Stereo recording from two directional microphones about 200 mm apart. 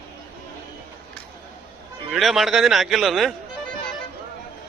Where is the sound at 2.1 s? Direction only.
Centre (ahead or behind).